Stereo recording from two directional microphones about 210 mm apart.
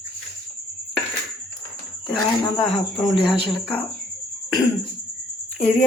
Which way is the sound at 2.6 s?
Centre (ahead or behind).